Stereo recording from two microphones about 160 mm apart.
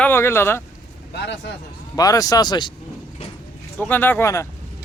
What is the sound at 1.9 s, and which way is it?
Speech, 20° left (ahead or behind).